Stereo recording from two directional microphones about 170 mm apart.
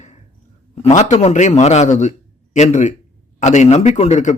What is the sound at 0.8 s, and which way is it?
A man's voice, 40° left (ahead or behind).